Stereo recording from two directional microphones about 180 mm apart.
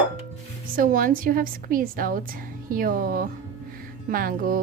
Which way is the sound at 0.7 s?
50° right (ahead or behind).